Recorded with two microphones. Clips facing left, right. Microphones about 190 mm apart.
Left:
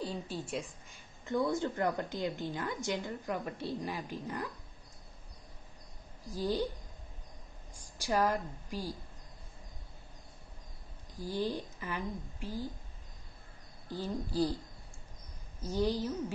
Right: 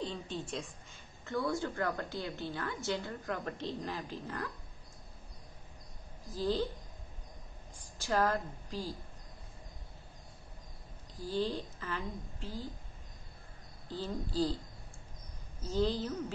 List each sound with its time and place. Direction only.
0.0 s a sound: 10° left (ahead or behind)
1.2 s a woman's voice: 20° left (ahead or behind)
6.3 s a woman's voice: 15° left (ahead or behind)
8.0 s a woman's voice: 15° left (ahead or behind)
11.2 s a woman's voice: 15° left (ahead or behind)
13.8 s a woman's voice: 15° left (ahead or behind)
15.6 s a woman's voice: 15° left (ahead or behind)